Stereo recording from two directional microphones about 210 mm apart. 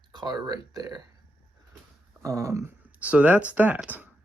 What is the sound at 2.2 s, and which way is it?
Speech, 15° right (ahead or behind).